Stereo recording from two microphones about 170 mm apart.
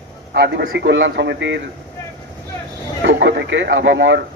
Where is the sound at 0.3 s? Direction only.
80° right.